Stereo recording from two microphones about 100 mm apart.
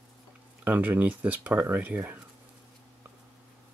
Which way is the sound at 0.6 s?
15° right (ahead or behind).